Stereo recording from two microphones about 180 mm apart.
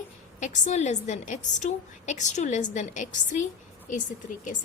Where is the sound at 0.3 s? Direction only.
45° left (ahead or behind).